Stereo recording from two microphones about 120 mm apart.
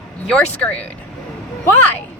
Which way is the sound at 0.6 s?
15° left (ahead or behind).